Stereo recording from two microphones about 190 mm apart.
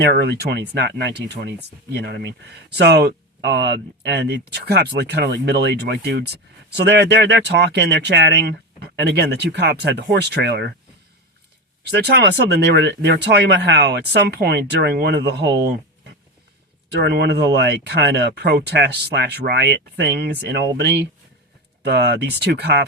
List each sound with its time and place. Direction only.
0.0 s speech: 60° right (ahead or behind)
11.8 s speech: 60° right (ahead or behind)
17.0 s speech: 60° right (ahead or behind)